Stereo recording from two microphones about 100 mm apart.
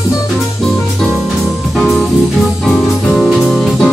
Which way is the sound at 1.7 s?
Centre (ahead or behind).